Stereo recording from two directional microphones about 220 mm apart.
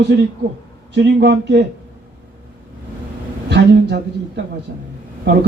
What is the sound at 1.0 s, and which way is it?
Speech, 45° right (ahead or behind).